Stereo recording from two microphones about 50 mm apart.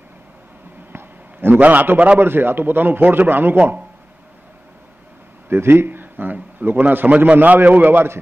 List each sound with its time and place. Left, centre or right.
0.9 s a sound: right
1.6 s a man's voice: right
2.1 s a man's voice: right
5.5 s a man's voice: right
7.1 s a man's voice: right